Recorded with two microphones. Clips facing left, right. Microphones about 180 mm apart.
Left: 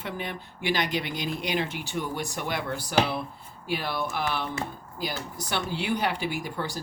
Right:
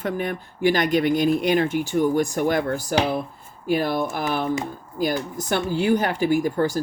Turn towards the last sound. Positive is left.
turn(degrees=-45)  # may be behind; listen again after turning